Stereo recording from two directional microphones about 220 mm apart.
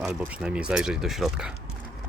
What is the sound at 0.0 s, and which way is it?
Speech, 5° right (ahead or behind).